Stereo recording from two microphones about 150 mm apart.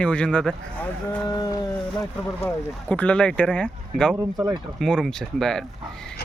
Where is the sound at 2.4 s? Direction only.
10° left (ahead or behind).